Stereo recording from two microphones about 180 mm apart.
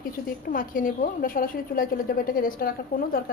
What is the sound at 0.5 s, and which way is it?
A woman's voice, 50° left (ahead or behind).